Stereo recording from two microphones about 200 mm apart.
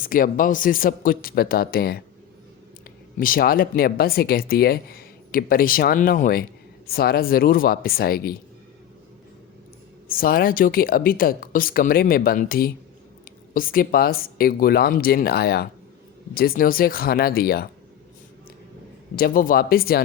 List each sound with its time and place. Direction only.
0.0 s speech: 45° left (ahead or behind)
3.2 s speech: 45° left (ahead or behind)
10.1 s speech: 45° left (ahead or behind)
19.1 s speech: 45° left (ahead or behind)